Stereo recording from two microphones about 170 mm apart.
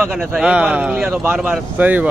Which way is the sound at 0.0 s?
10° right (ahead or behind).